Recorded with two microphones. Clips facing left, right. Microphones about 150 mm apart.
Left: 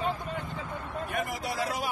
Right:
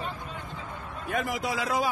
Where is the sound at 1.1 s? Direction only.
90° right.